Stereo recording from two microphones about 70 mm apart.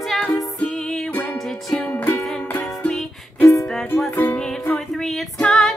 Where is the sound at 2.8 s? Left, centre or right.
Centre.